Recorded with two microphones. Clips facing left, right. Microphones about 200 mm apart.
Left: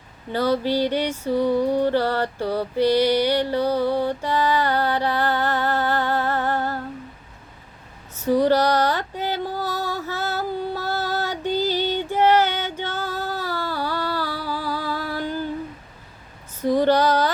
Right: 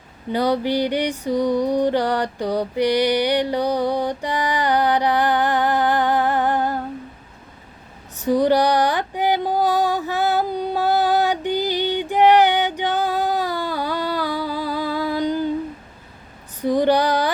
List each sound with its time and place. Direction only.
0.3 s music: 15° right (ahead or behind)
8.1 s female singing: 15° right (ahead or behind)
16.6 s female singing: 15° right (ahead or behind)